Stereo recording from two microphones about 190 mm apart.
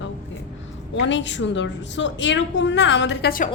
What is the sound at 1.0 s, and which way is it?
A woman's voice, 75° left (ahead or behind).